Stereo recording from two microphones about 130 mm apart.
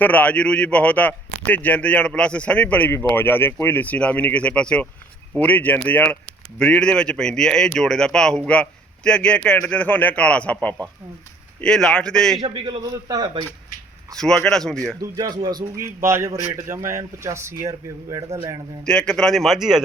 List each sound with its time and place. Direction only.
0.0 s a man's voice: 10° left (ahead or behind)
12.4 s a man's voice: 40° right (ahead or behind)
14.2 s a man's voice: 5° left (ahead or behind)
15.4 s a man's voice: 25° right (ahead or behind)
18.9 s a man's voice: 5° left (ahead or behind)